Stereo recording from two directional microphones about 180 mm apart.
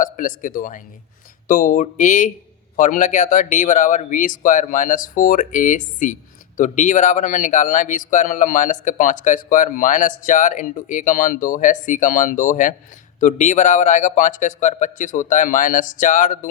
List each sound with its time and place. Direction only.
0.0 s speech: 45° left (ahead or behind)